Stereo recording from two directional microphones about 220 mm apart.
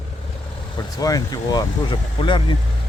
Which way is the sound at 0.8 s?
15° left (ahead or behind).